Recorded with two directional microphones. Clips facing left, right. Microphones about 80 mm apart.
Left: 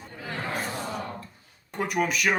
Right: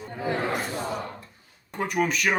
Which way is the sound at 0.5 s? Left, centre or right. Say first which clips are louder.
Right 3 dB; centre.